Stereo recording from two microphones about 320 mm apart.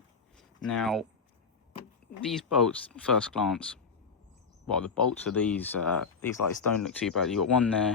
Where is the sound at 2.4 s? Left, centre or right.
Centre.